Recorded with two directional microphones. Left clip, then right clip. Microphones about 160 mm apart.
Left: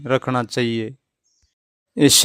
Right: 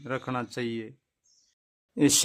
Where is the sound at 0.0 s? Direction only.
35° left (ahead or behind).